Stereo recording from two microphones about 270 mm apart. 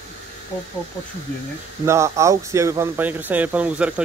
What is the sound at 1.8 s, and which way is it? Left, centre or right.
Speech, centre.